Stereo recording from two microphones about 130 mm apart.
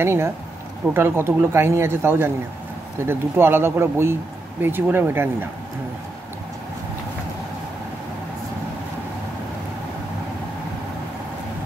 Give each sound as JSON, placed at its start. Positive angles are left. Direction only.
{"t": 0.0, "sound": "speech", "side_deg": -20}